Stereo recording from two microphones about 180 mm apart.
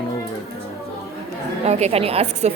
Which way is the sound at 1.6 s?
35° right (ahead or behind).